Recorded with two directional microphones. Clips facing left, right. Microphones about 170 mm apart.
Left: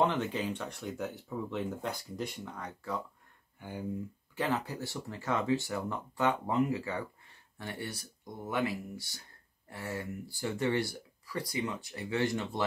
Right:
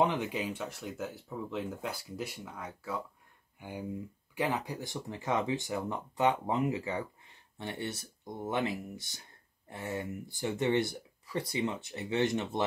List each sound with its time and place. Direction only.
0.0 s speech: 10° right (ahead or behind)